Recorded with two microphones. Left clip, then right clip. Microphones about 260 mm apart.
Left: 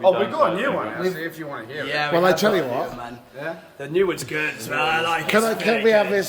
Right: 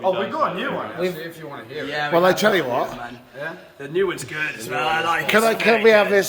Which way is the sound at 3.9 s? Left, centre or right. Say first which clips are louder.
Left 1 dB; left.